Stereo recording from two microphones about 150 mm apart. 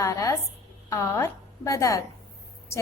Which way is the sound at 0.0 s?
20° left (ahead or behind).